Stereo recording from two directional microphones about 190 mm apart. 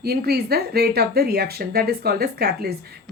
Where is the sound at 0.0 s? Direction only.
55° right (ahead or behind).